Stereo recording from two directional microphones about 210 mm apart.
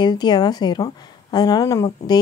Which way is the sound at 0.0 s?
20° left (ahead or behind).